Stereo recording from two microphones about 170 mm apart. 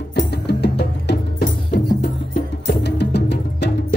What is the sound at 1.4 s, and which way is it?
Music, 55° left (ahead or behind).